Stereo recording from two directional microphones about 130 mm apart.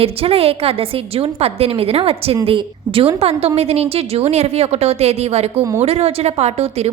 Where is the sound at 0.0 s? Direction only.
45° right (ahead or behind).